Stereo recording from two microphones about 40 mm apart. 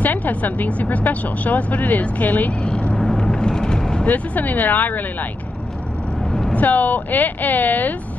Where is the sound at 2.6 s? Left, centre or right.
Left.